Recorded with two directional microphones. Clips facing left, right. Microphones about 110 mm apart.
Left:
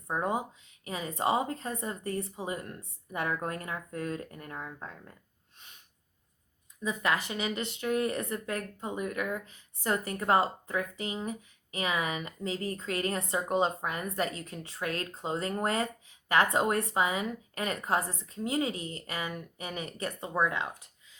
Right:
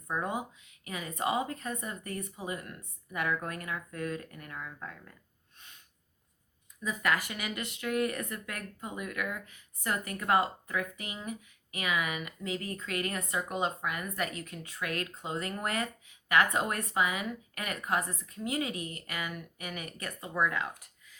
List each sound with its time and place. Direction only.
0.1 s a woman's voice: 30° left (ahead or behind)
6.8 s a woman's voice: 25° left (ahead or behind)